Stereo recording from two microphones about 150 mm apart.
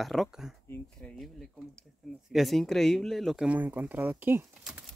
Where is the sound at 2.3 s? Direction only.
Centre (ahead or behind); by 4.4 s 15° right (ahead or behind).